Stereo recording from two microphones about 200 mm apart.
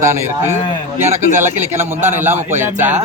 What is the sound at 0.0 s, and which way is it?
Speech, 10° right (ahead or behind).